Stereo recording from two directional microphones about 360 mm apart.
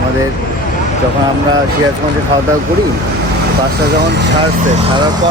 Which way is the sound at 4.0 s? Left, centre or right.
Right.